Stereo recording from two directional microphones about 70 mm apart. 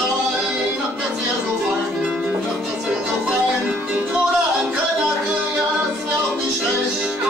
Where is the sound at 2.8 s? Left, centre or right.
Centre.